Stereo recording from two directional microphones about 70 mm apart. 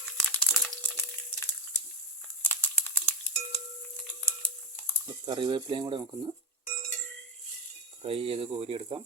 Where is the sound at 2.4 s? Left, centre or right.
Left.